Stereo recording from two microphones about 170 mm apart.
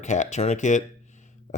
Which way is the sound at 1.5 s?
45° left (ahead or behind).